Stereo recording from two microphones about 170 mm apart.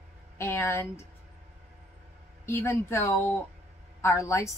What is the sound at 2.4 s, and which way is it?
A woman's voice, 15° left (ahead or behind).